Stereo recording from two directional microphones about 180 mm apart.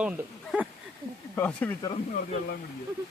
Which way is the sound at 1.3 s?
10° left (ahead or behind).